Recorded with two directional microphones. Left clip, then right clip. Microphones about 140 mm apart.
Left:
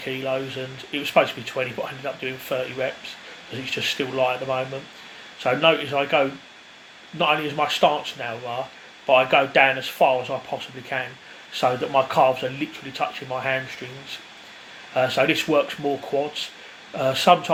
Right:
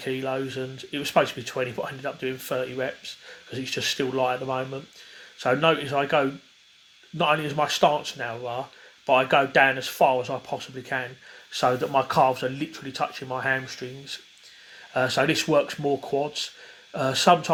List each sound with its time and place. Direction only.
0.0 s speech: 80° right
11.6 s speech: 85° right
14.9 s speech: 80° right
17.0 s speech: 85° right